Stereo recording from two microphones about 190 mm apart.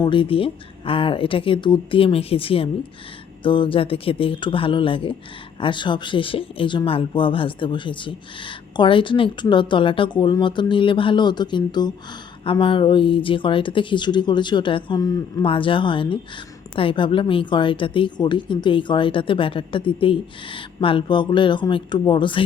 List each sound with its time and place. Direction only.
0.0 s speech: 25° left (ahead or behind)